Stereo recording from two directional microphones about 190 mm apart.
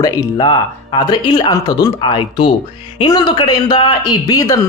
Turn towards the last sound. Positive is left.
turn(degrees=20)  # may be behind; listen again after turning